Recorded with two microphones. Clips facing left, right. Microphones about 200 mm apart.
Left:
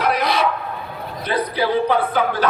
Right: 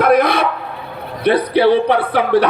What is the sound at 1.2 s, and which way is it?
Speech, 65° right (ahead or behind).